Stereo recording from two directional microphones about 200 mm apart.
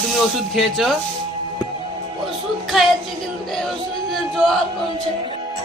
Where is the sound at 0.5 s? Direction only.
Centre (ahead or behind).